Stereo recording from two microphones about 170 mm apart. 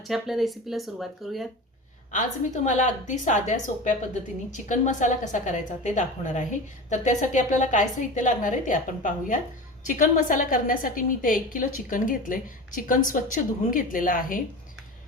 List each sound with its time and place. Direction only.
0.0 s speech: centre (ahead or behind)
2.1 s a woman's voice: 45° left (ahead or behind)